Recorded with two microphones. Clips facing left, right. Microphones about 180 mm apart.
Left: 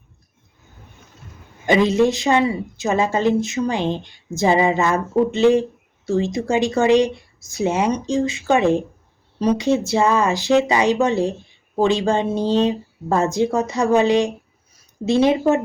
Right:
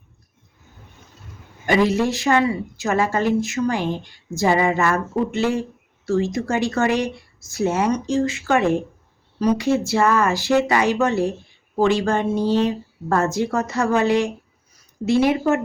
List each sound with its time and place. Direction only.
1.6 s a woman's voice: 20° left (ahead or behind)